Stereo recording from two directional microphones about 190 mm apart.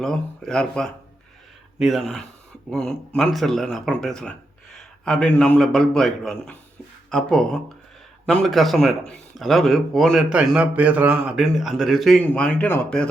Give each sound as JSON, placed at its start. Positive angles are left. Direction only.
{"t": 0.0, "sound": "a man's voice", "side_deg": 5}